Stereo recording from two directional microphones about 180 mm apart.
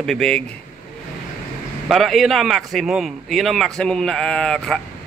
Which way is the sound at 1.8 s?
Centre (ahead or behind).